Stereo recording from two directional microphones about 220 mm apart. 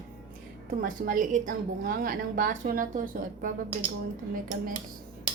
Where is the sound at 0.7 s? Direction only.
40° right (ahead or behind).